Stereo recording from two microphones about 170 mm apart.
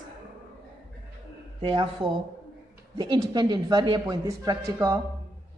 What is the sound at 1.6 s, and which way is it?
Speech, 30° right (ahead or behind).